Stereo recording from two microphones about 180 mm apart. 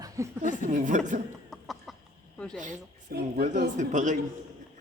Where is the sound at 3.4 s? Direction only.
45° right (ahead or behind).